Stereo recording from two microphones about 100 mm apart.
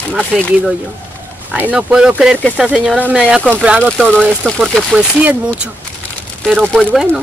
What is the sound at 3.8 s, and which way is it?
Speech, 5° left (ahead or behind).